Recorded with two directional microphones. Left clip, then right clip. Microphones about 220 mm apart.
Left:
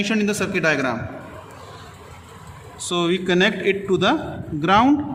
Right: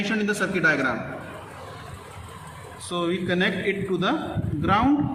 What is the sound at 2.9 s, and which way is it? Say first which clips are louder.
A man's voice: left 5 dB; 50° left (ahead or behind).